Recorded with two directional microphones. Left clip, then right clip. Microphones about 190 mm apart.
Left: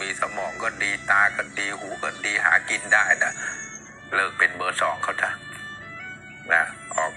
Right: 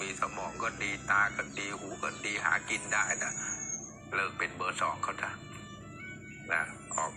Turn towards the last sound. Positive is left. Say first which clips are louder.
# left 9 dB
turn(degrees=30)  # may be behind; listen again after turning